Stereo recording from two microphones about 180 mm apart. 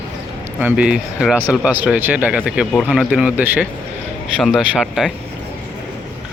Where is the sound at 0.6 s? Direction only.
10° right (ahead or behind).